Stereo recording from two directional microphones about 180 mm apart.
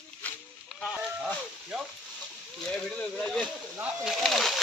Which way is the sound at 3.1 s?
5° left (ahead or behind).